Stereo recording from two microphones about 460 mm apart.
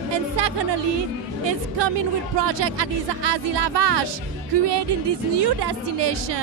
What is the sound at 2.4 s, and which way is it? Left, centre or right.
Speech, right.